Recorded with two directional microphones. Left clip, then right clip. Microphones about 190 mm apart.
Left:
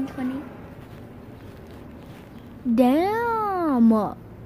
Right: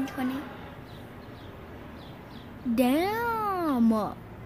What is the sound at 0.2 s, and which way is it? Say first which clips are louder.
Speech: left 1 dB; 15° right (ahead or behind).